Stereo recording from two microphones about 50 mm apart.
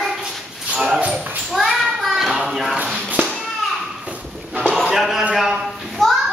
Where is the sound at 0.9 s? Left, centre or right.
Right.